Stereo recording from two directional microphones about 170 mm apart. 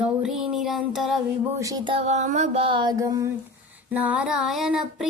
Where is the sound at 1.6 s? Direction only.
20° right (ahead or behind).